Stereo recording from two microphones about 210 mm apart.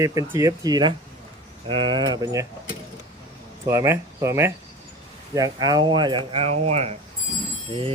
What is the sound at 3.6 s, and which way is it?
Speech, 15° right (ahead or behind).